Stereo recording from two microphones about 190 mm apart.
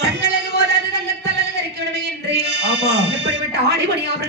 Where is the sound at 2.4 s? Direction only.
65° right (ahead or behind).